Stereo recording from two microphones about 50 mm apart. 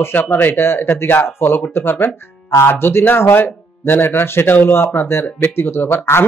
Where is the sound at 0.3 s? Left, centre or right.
Left.